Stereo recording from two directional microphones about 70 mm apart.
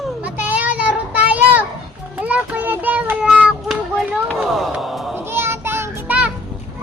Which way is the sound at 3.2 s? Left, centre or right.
Centre.